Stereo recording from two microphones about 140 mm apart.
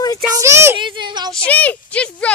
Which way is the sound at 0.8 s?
35° right (ahead or behind).